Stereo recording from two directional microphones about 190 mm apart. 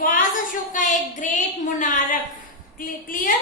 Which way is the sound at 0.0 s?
45° left (ahead or behind).